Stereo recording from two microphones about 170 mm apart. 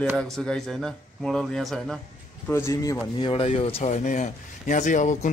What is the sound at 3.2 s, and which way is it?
Speech, 35° left (ahead or behind).